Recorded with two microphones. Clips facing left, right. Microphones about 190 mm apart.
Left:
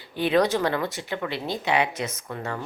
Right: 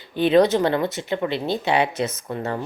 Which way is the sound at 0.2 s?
25° right (ahead or behind).